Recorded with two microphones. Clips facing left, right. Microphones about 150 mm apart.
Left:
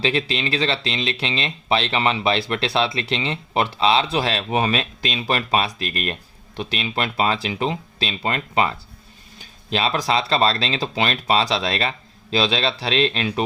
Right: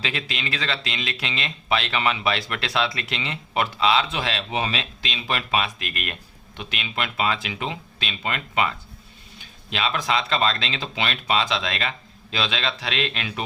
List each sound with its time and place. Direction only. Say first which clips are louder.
0.0 s speech: left 8 dB; 30° left (ahead or behind)